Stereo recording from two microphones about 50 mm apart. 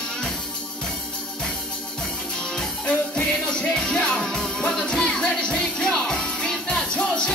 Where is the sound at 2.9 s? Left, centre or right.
Centre.